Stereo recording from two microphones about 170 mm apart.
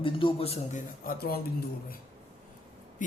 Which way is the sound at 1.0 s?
60° left (ahead or behind).